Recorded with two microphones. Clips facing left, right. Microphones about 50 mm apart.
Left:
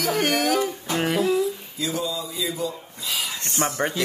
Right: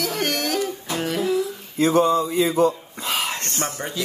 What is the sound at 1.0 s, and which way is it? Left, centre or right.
Speech, left.